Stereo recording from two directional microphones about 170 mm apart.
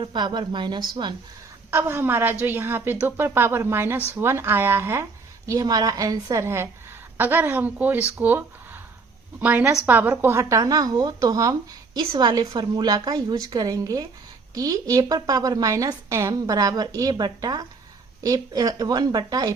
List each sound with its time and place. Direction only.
0.0 s a woman's voice: 25° right (ahead or behind)
1.7 s a woman's voice: 15° right (ahead or behind)